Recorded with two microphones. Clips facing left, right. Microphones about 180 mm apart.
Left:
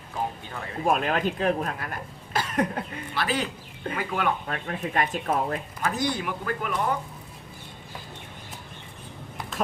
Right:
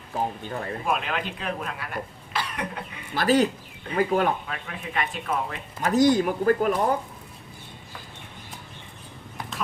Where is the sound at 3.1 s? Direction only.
45° right (ahead or behind).